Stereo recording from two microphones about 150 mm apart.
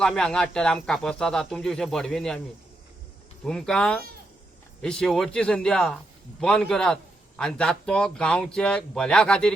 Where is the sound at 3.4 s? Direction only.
5° left (ahead or behind).